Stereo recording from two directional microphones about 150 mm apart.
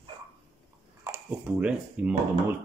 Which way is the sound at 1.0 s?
15° right (ahead or behind).